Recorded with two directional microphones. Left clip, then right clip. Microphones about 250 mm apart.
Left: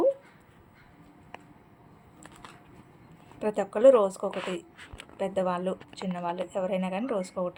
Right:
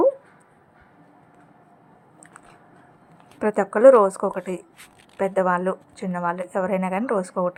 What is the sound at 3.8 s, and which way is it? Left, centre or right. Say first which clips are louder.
Speech: right 6 dB; centre.